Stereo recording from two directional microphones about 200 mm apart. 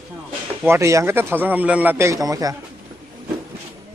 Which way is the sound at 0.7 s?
15° right (ahead or behind).